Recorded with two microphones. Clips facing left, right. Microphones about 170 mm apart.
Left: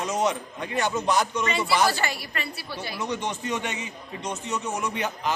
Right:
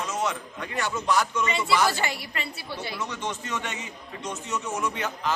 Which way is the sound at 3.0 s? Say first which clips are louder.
Left 4 dB; 15° left (ahead or behind).